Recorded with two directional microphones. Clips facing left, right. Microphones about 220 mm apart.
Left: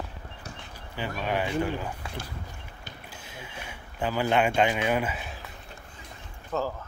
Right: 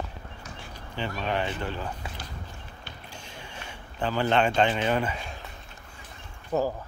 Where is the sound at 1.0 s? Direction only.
10° left (ahead or behind).